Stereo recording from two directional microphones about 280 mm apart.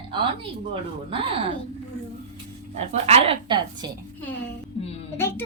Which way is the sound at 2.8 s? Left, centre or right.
Right.